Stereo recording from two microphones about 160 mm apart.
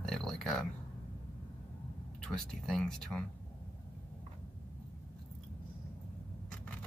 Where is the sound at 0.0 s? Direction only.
Centre (ahead or behind).